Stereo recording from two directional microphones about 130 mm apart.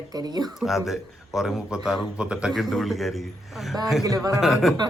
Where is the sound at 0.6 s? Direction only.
Centre (ahead or behind).